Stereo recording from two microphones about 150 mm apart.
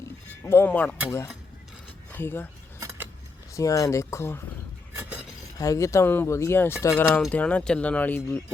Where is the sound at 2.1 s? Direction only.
15° left (ahead or behind).